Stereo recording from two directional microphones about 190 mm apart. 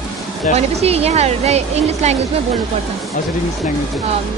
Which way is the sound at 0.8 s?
35° right (ahead or behind).